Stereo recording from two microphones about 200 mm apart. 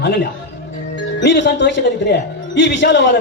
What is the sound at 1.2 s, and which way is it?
Speech, 60° left (ahead or behind).